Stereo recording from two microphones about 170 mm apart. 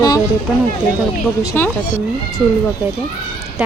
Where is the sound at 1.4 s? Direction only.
15° left (ahead or behind).